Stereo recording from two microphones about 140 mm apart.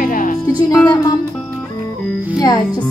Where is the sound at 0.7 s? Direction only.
15° left (ahead or behind).